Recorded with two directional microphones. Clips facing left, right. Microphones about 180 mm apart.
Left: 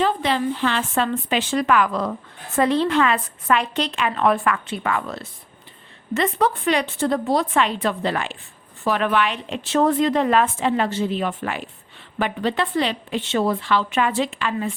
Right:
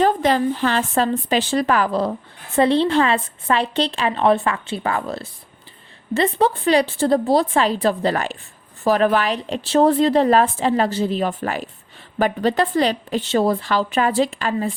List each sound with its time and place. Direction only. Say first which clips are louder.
0.0 s speech: right 4 dB; 45° right (ahead or behind)